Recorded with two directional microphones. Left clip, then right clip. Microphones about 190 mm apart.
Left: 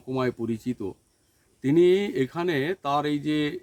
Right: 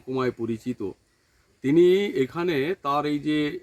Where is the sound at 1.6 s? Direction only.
20° left (ahead or behind).